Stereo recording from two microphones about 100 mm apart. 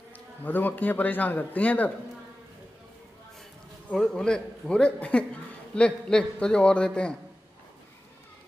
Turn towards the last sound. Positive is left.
turn(degrees=10)  # may be behind; listen again after turning